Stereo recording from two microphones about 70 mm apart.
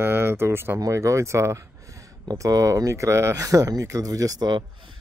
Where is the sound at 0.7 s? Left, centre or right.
Right.